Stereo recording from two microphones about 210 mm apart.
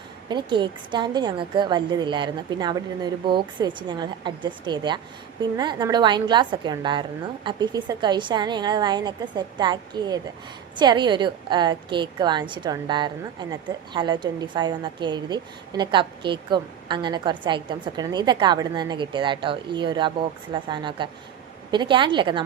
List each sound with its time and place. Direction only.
0.3 s a woman's voice: 20° right (ahead or behind)